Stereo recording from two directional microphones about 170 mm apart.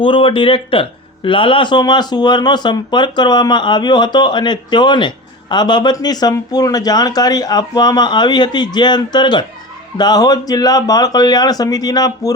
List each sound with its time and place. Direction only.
0.0 s speech: 30° left (ahead or behind)